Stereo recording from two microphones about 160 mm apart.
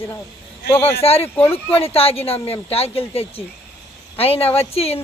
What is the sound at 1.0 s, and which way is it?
Speech, 40° left (ahead or behind).